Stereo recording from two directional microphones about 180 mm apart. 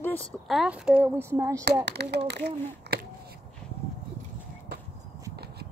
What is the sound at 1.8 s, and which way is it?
Speech, 70° right (ahead or behind).